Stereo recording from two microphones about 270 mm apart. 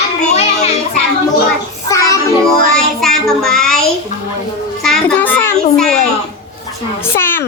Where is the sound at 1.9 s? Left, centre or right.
Centre.